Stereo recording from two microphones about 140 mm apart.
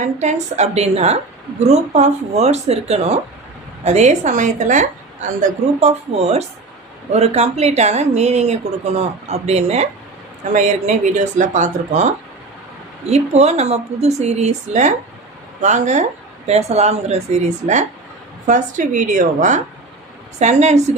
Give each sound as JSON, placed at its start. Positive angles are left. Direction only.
{"t": 0.0, "sound": "a woman's voice", "side_deg": -55}